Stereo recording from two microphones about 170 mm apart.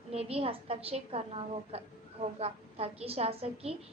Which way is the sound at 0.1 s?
35° right (ahead or behind).